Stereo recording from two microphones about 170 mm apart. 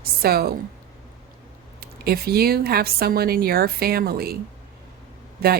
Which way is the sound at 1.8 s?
65° right (ahead or behind).